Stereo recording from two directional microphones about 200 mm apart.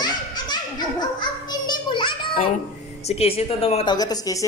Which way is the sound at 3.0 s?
30° left (ahead or behind).